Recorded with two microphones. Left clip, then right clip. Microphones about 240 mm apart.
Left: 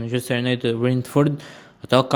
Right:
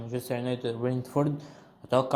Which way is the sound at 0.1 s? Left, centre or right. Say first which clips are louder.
Left 8 dB; left.